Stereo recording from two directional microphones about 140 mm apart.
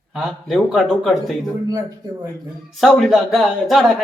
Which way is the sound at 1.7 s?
25° right (ahead or behind).